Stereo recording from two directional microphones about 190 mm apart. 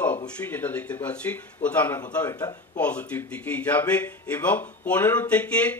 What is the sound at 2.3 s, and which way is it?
Speech, 20° left (ahead or behind).